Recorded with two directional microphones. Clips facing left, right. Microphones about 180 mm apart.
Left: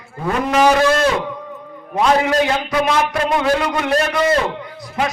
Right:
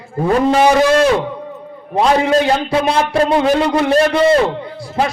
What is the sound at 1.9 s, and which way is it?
A man's voice, 30° right (ahead or behind).